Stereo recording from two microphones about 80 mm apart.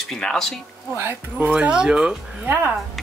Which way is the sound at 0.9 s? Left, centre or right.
Right.